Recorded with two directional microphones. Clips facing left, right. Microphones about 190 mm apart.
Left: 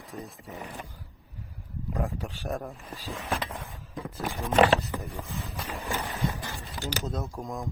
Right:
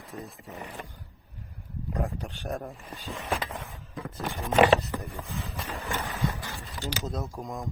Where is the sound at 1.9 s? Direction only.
Centre (ahead or behind).